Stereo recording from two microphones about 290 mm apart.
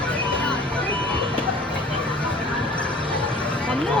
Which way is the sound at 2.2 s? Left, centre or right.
Centre.